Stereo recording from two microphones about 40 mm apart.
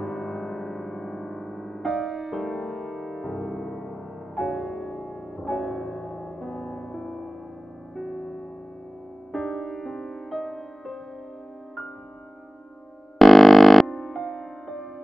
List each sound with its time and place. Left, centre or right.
0.0 s music: centre
13.2 s music: centre